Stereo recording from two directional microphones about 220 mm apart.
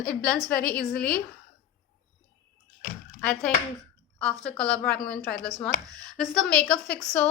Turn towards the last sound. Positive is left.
turn(degrees=5)  # may be behind; listen again after turning